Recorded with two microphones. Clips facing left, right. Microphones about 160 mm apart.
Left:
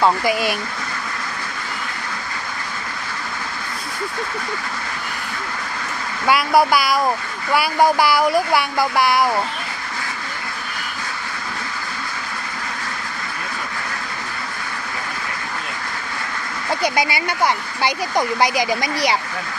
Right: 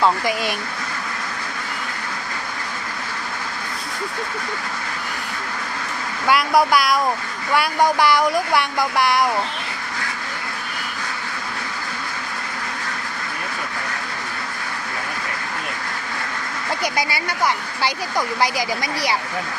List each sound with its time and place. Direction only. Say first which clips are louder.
0.0 s speech: left 2 dB; 5° left (ahead or behind)
6.2 s speech: left 1 dB; 5° left (ahead or behind)
16.8 s speech: left 4 dB; 25° left (ahead or behind)